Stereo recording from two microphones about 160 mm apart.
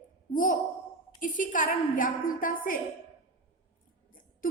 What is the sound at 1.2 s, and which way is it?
A woman's voice, 55° left (ahead or behind).